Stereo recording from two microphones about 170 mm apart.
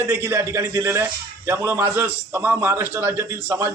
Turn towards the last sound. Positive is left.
turn(degrees=-15)  # may be behind; listen again after turning